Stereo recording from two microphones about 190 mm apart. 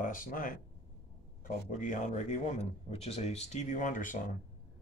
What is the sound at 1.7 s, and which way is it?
Speech, 40° left (ahead or behind).